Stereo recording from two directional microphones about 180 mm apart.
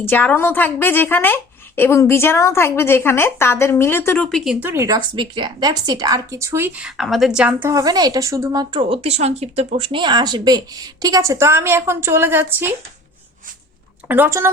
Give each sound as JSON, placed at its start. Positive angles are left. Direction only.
{"t": 0.0, "sound": "speech", "side_deg": 10}
{"t": 4.6, "sound": "speech", "side_deg": -15}
{"t": 7.7, "sound": "speech", "side_deg": -20}
{"t": 8.7, "sound": "speech", "side_deg": -30}
{"t": 14.1, "sound": "speech", "side_deg": -15}